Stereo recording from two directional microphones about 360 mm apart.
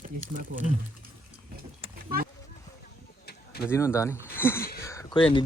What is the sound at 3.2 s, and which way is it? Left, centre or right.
Bird, left.